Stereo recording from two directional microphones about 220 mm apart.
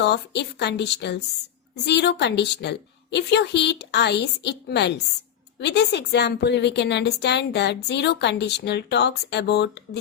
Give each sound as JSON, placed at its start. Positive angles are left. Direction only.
{"t": 0.0, "sound": "a woman's voice", "side_deg": 50}